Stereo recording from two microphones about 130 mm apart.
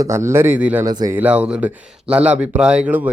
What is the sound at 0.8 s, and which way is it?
Speech, 30° right (ahead or behind).